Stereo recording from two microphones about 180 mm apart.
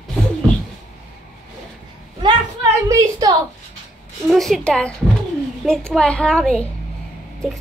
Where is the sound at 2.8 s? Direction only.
20° right (ahead or behind).